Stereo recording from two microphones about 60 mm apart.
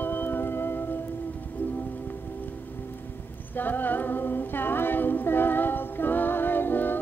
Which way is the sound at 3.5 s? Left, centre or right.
Left.